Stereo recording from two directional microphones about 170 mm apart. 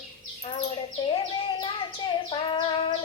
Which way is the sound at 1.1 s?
30° left (ahead or behind).